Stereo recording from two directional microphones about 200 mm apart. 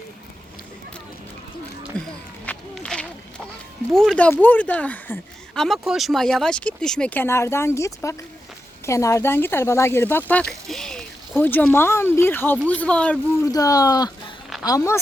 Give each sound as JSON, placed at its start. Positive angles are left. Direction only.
{"t": 1.9, "sound": "speech", "side_deg": 5}
{"t": 2.5, "sound": "run", "side_deg": 5}
{"t": 4.1, "sound": "speech", "side_deg": 10}
{"t": 13.5, "sound": "speech", "side_deg": 15}